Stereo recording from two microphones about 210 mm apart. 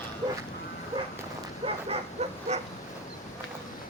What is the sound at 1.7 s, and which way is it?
Bow-wow, 30° right (ahead or behind).